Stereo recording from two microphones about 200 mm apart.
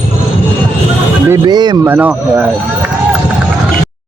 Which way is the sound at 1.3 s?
20° right (ahead or behind).